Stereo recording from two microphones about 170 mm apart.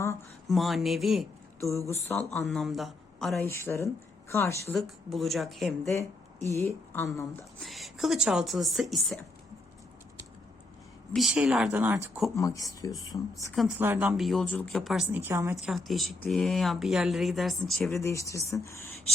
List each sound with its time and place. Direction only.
0.4 s speech: centre (ahead or behind)
1.9 s speech: 15° left (ahead or behind)
2.5 s speech: centre (ahead or behind)
3.3 s speech: 15° left (ahead or behind)
4.7 s speech: centre (ahead or behind)
5.9 s speech: 15° left (ahead or behind)
7.6 s speech: centre (ahead or behind)
11.1 s speech: centre (ahead or behind)
12.4 s speech: 20° left (ahead or behind)
13.7 s a woman's voice: 10° right (ahead or behind)
14.2 s speech: centre (ahead or behind)
15.1 s a woman's voice: 15° right (ahead or behind)
15.5 s speech: centre (ahead or behind)
17.9 s speech: 15° left (ahead or behind)